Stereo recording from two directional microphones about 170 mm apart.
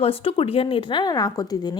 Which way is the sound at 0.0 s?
35° left (ahead or behind).